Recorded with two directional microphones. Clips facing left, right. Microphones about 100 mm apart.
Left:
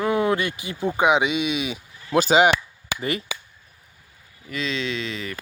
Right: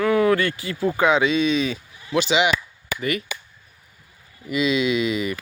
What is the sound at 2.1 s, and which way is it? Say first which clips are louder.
Speech: left 3 dB; 40° left (ahead or behind).